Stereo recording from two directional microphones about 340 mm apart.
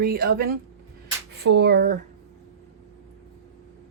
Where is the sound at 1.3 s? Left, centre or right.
Right.